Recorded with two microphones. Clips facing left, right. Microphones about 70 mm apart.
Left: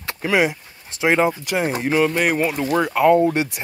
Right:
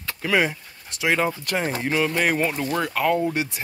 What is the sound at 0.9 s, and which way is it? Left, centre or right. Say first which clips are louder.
Speech: left 5 dB; left.